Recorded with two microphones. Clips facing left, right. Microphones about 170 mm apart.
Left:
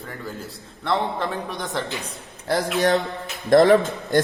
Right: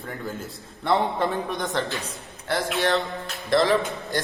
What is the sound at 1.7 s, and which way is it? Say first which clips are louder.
Speech: left 1 dB; 20° left (ahead or behind).